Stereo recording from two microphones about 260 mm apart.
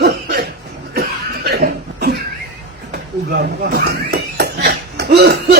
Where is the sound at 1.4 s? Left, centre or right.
Right.